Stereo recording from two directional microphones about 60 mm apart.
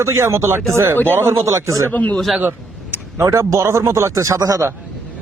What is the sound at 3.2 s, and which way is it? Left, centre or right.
Speech, right.